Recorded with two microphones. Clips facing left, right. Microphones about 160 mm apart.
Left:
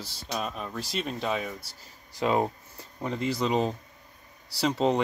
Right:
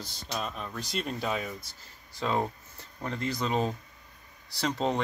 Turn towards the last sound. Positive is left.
turn(degrees=5)  # may be behind; listen again after turning